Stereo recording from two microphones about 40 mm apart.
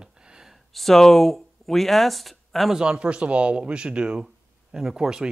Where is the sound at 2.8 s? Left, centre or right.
Right.